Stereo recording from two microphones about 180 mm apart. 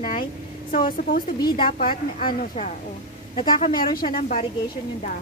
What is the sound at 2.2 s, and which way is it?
Speech, 45° left (ahead or behind).